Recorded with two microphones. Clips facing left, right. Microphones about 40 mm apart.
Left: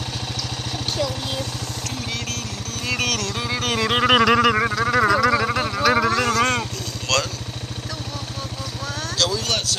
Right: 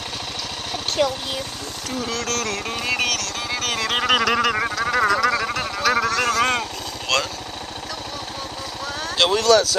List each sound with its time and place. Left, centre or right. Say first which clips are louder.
1.0 s speech: right 5 dB; right
2.1 s music: right 5 dB; right
2.9 s vehicle: even; centre
3.2 s vehicle: left 1 dB; centre
9.2 s a sound: right 4 dB; right